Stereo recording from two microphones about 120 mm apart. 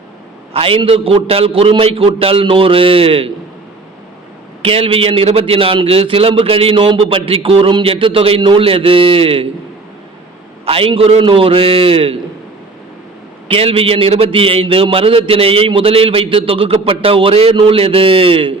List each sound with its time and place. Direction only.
0.5 s a man's voice: 50° right (ahead or behind)
4.6 s a man's voice: 50° right (ahead or behind)
10.7 s a man's voice: 50° right (ahead or behind)
13.5 s a man's voice: 55° right (ahead or behind)